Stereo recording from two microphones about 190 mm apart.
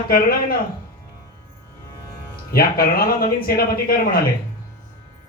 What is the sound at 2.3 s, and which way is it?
Speech, 50° left (ahead or behind).